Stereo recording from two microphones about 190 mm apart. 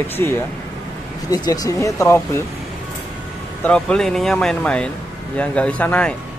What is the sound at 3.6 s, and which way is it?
Speech, 5° left (ahead or behind).